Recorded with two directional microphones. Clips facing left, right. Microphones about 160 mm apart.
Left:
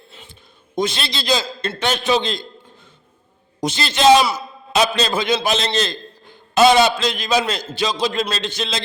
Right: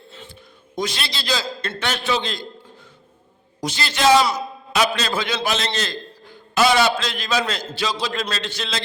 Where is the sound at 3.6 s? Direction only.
20° left (ahead or behind).